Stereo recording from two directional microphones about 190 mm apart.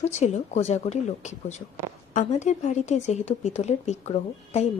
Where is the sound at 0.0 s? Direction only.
35° left (ahead or behind).